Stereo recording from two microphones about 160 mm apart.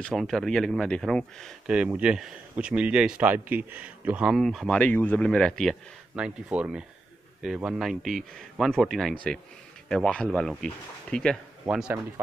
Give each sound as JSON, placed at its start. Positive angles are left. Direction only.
{"t": 0.0, "sound": "speech", "side_deg": 0}
{"t": 11.6, "sound": "speech", "side_deg": -10}